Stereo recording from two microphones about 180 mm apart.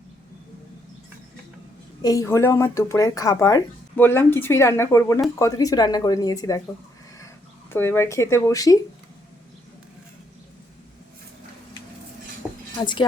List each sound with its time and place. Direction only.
2.0 s speech: 20° left (ahead or behind)
7.7 s speech: 15° left (ahead or behind)
12.4 s dishes: centre (ahead or behind)
12.8 s speech: 25° left (ahead or behind)